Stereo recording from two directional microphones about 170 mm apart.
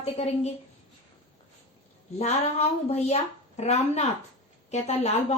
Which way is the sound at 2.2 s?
40° left (ahead or behind).